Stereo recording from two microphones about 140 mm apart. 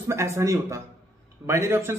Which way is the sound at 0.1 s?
20° right (ahead or behind).